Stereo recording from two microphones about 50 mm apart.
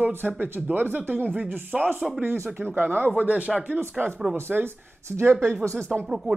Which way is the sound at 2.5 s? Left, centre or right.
Right.